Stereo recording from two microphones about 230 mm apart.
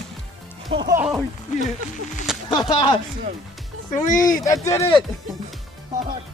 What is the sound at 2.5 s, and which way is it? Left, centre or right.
Speech, centre.